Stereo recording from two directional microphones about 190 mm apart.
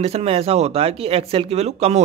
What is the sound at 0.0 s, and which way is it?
Speech, 30° right (ahead or behind).